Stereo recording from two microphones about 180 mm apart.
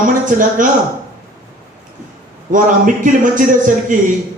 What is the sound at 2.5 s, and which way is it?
Speech, 45° right (ahead or behind).